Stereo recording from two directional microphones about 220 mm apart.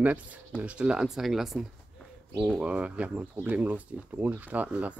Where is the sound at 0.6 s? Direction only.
5° right (ahead or behind).